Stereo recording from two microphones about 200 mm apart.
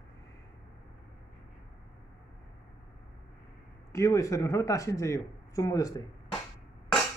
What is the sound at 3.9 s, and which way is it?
Speech, 15° left (ahead or behind).